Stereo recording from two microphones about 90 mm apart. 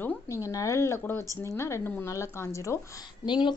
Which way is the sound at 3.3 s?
55° left (ahead or behind).